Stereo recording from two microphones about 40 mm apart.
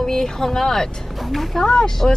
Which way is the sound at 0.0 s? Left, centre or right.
Centre.